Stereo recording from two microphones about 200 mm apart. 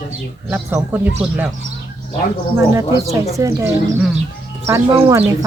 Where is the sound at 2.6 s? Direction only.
15° right (ahead or behind).